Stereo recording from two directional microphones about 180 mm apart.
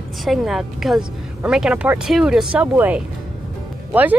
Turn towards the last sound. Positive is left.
turn(degrees=-10)  # may be behind; listen again after turning